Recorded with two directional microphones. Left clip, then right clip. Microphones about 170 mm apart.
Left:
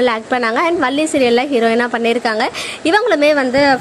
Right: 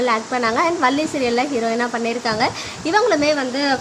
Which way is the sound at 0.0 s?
30° left (ahead or behind).